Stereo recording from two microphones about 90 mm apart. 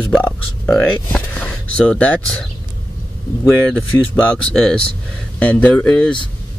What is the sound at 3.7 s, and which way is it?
Speech, 15° left (ahead or behind).